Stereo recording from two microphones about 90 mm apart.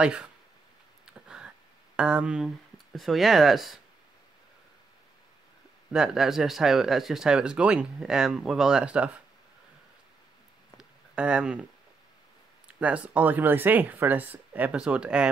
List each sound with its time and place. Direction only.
0.0 s speech: 10° right (ahead or behind)
1.0 s a sound: 10° right (ahead or behind)
2.0 s speech: 10° right (ahead or behind)
5.9 s speech: 5° right (ahead or behind)
10.8 s a sound: 10° right (ahead or behind)
12.6 s speech: 15° right (ahead or behind)